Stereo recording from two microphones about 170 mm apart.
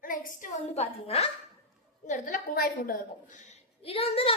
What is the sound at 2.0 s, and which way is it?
A woman's voice, 50° left (ahead or behind).